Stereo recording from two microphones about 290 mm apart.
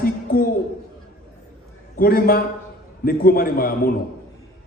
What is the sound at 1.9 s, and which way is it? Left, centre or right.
A man's voice, left.